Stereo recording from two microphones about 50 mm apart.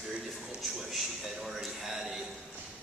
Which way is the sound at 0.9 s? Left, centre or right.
Centre.